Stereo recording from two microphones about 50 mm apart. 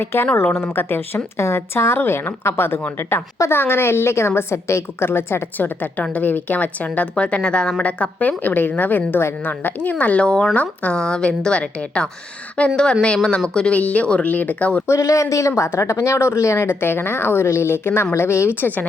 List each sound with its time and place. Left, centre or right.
0.0 s a woman's voice: left
2.0 s a woman's voice: left
3.5 s a woman's voice: left
5.0 s a woman's voice: left
14.8 s speech: left
16.6 s a woman's voice: left